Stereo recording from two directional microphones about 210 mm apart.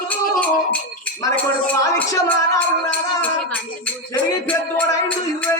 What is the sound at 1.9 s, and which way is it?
Music, 10° left (ahead or behind).